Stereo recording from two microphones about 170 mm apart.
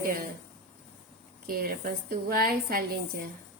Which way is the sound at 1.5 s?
60° right (ahead or behind).